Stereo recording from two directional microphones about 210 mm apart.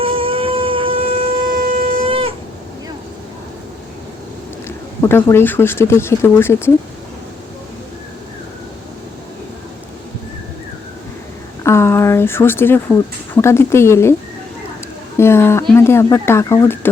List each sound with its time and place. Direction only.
0.0 s shofar: 25° right (ahead or behind)
1.5 s shofar: 45° right (ahead or behind)
1.7 s shofar: 25° right (ahead or behind)
4.9 s speech: 10° left (ahead or behind)
11.6 s speech: 10° left (ahead or behind)
15.2 s speech: 10° left (ahead or behind)